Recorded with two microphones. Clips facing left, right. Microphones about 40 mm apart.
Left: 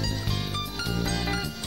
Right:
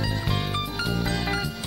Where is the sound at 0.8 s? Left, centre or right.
Centre.